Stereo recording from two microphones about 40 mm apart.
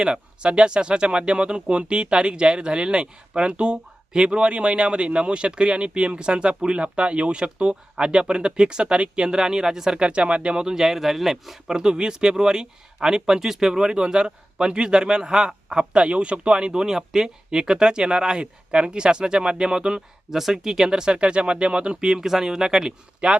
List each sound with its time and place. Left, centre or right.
0.0 s speech: right
10.0 s speech: right; by 11.5 s centre
11.7 s speech: centre
20.3 s speech: centre
23.2 s speech: right